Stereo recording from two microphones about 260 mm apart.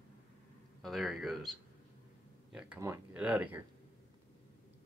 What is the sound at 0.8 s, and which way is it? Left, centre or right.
Speech, centre.